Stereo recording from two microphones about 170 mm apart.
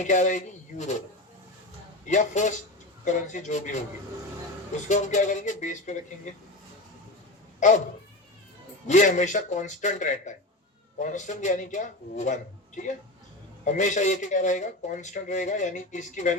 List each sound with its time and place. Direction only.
0.0 s speech: 45° left (ahead or behind)
2.0 s speech: 45° left (ahead or behind)
4.9 s speech: 45° left (ahead or behind)
7.6 s speech: 45° left (ahead or behind)
8.9 s speech: 45° left (ahead or behind)